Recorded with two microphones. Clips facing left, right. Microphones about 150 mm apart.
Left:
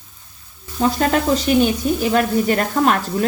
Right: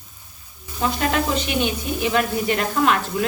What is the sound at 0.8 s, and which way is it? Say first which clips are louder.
Speech: left 4 dB; 40° left (ahead or behind).